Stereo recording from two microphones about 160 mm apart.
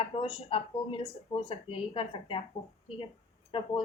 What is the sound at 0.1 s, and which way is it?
Speech, 35° left (ahead or behind).